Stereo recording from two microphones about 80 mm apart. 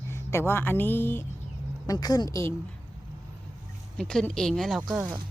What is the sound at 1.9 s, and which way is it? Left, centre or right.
Speech, left.